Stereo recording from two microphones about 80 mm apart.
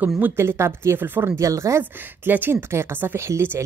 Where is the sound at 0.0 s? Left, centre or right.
Right.